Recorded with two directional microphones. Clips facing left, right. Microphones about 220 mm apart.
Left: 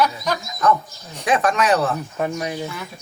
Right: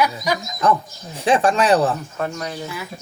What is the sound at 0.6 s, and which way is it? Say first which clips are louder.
Speech: even; 30° right (ahead or behind).